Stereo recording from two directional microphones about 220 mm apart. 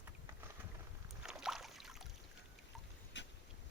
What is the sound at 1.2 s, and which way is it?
Rowboat, centre (ahead or behind).